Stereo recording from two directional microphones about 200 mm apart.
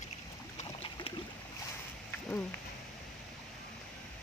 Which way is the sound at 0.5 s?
30° left (ahead or behind).